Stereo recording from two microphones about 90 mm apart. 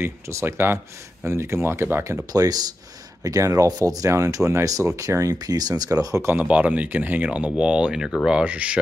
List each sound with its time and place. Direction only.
0.3 s speech: 30° right (ahead or behind)
2.3 s speech: 45° right (ahead or behind)
6.4 s speech: 15° right (ahead or behind)